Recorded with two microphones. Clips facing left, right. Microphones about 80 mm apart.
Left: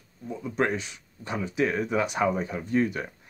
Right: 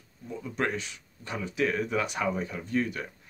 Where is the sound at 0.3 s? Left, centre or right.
Left.